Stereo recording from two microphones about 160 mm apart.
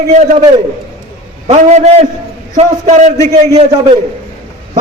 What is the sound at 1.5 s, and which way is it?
A man's voice, 45° right (ahead or behind).